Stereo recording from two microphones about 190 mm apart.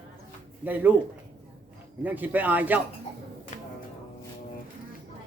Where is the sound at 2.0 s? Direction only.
10° right (ahead or behind).